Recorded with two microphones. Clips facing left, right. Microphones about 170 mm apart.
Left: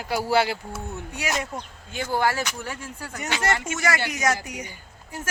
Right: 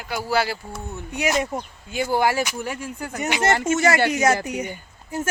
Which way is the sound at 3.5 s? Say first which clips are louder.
Right 8 dB; 45° right (ahead or behind).